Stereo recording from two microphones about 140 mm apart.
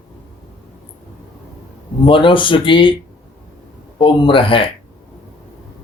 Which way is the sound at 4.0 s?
35° left (ahead or behind).